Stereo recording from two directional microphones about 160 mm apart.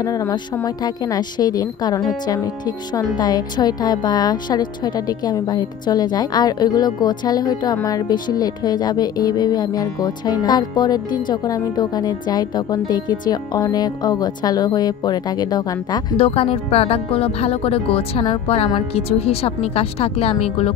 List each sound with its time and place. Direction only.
0.0 s speech: 20° left (ahead or behind); by 20.7 s 40° left (ahead or behind)